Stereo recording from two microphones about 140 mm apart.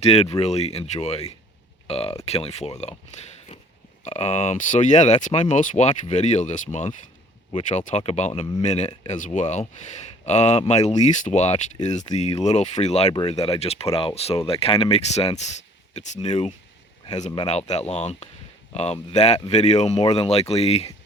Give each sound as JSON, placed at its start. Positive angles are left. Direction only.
{"t": 0.0, "sound": "speech", "side_deg": 45}